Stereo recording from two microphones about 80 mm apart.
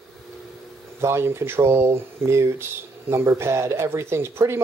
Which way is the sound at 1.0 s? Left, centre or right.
Right.